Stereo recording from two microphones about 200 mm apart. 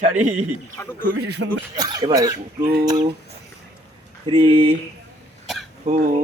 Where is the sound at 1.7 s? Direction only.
20° right (ahead or behind).